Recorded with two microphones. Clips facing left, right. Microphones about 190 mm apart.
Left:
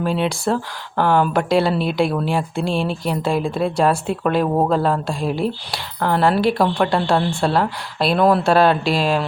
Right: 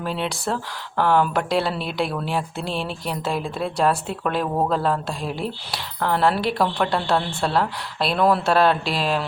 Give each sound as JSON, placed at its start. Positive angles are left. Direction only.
{"t": 0.0, "sound": "speech", "side_deg": 0}
{"t": 4.4, "sound": "a man's voice", "side_deg": 20}
{"t": 4.7, "sound": "speech", "side_deg": 0}